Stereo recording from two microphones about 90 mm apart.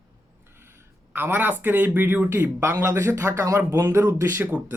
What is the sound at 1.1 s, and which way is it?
A man's voice, 20° right (ahead or behind).